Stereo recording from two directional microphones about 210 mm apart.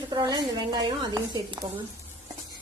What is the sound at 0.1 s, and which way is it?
Speech, 20° right (ahead or behind).